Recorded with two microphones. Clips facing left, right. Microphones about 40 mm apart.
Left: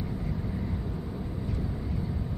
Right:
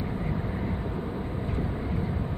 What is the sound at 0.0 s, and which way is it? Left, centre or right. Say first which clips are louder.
Vehicle: right 3 dB; right.